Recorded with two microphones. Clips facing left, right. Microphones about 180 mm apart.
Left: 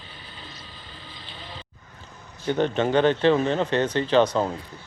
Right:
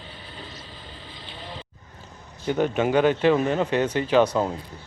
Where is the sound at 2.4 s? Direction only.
10° right (ahead or behind).